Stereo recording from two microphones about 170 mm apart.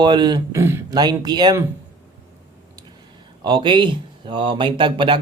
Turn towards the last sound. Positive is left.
turn(degrees=-30)  # may be behind; listen again after turning